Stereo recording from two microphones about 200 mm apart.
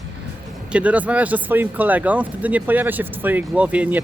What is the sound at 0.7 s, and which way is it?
Speech, 5° right (ahead or behind).